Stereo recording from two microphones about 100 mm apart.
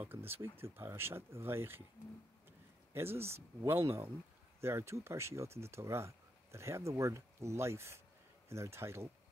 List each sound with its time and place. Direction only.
0.0 s speech: 20° right (ahead or behind)
2.9 s speech: 25° right (ahead or behind)